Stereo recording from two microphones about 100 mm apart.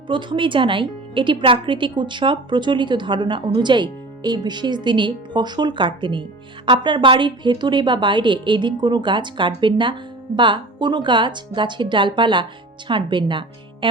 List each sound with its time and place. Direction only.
0.1 s speech: 55° right (ahead or behind)